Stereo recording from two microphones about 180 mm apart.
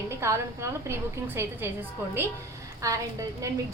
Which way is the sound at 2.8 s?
20° right (ahead or behind).